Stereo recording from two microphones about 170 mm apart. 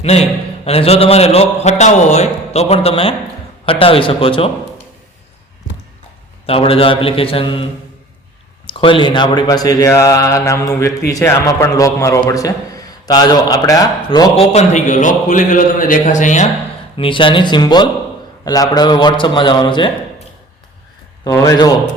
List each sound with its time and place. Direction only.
0.0 s a man's voice: 40° left (ahead or behind)
6.4 s a man's voice: 35° left (ahead or behind)
8.6 s a man's voice: 30° left (ahead or behind)
14.5 s a man's voice: 45° left (ahead or behind)
17.0 s speech: 30° left (ahead or behind)
21.2 s speech: 20° left (ahead or behind)